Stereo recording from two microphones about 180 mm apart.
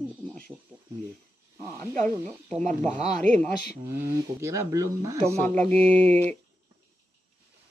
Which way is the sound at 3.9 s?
15° right (ahead or behind).